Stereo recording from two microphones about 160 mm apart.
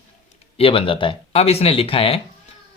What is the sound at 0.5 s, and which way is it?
Speech, 35° left (ahead or behind).